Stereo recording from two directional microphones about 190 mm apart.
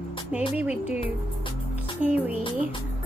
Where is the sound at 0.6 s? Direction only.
5° right (ahead or behind).